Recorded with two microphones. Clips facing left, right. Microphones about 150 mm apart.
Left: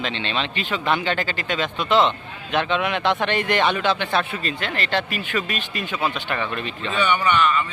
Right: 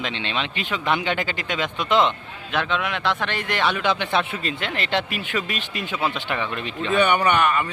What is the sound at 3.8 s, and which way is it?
Speech, 15° right (ahead or behind).